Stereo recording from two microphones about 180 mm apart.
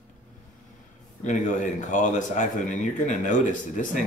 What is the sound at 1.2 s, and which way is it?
Speech, 45° left (ahead or behind).